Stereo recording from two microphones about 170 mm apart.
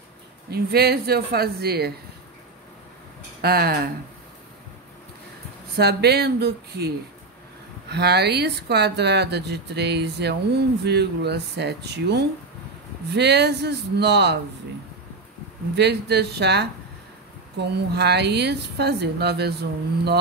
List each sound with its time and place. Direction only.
0.5 s speech: 70° right (ahead or behind)
3.3 s speech: 65° right (ahead or behind)
5.8 s speech: 75° right (ahead or behind)
7.9 s speech: 75° right (ahead or behind)
15.7 s speech: 80° right